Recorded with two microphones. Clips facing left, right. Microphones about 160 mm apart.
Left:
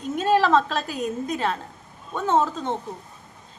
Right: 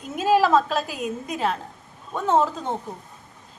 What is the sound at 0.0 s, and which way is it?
A woman's voice, 5° right (ahead or behind).